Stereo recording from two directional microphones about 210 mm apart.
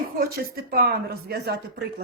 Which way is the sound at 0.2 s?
45° right (ahead or behind).